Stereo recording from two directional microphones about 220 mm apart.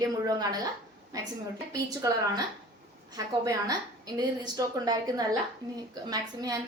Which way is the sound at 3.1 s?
15° right (ahead or behind).